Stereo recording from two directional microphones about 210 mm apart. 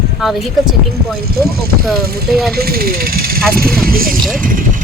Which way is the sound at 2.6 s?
45° right (ahead or behind).